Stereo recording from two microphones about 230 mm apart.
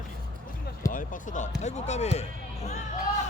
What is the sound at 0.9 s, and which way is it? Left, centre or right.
Speech, left.